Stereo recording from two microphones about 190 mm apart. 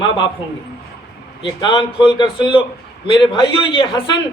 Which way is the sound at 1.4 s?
25° left (ahead or behind).